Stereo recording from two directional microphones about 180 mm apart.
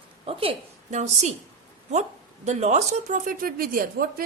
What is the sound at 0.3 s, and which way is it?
A woman's voice, 30° right (ahead or behind).